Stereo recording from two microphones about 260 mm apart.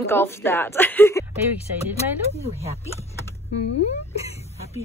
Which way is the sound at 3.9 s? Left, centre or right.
Left.